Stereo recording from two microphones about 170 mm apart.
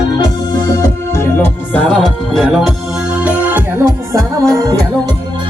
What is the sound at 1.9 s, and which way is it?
Music, centre (ahead or behind).